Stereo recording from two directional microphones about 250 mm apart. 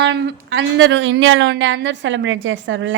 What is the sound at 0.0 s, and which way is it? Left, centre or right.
A woman's voice, right.